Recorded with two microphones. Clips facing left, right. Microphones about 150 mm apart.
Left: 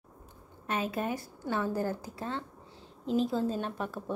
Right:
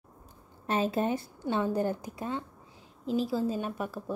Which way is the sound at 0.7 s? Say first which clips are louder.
Right 4 dB; 30° right (ahead or behind).